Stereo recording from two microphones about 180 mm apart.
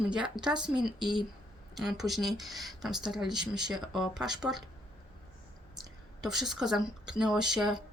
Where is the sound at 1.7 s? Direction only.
Centre (ahead or behind).